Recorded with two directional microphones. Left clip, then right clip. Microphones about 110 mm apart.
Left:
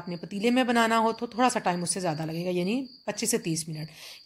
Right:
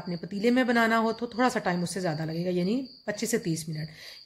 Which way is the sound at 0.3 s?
20° left (ahead or behind).